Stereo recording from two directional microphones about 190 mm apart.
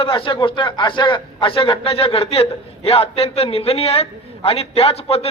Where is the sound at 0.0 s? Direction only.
30° left (ahead or behind).